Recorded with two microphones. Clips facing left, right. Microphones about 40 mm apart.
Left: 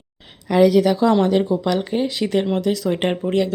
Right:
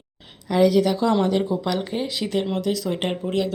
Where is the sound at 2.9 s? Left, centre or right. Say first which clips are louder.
Left 5 dB; left.